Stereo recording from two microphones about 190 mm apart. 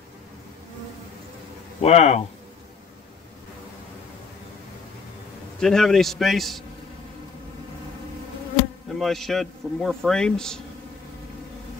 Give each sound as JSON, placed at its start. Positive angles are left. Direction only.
{"t": 1.8, "sound": "speech", "side_deg": 35}
{"t": 5.6, "sound": "a man's voice", "side_deg": 0}
{"t": 8.9, "sound": "a man's voice", "side_deg": 0}